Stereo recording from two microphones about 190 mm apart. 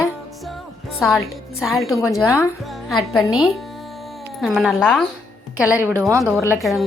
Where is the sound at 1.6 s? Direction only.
Centre (ahead or behind).